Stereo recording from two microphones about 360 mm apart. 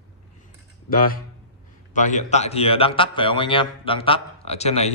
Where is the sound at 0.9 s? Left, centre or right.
Left.